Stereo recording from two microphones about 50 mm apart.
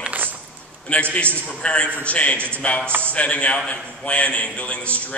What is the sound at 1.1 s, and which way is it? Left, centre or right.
A man's voice, left.